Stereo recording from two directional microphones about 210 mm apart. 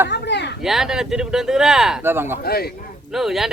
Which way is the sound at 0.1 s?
55° left (ahead or behind).